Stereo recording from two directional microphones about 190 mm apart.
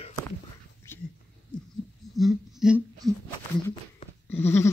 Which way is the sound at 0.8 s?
15° left (ahead or behind).